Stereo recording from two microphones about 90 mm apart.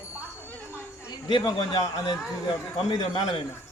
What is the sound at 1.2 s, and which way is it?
A man's voice, 55° left (ahead or behind).